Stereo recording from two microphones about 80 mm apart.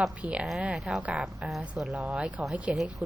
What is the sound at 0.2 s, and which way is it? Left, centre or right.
A woman's voice, centre.